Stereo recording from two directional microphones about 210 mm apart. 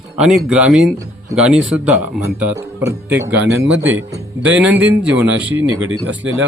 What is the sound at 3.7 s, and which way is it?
Speech, 65° right (ahead or behind).